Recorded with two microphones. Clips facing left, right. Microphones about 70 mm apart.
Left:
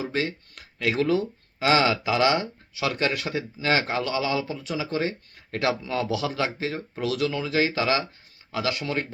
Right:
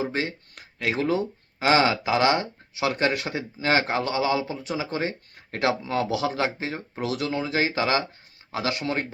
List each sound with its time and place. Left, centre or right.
0.0 s speech: right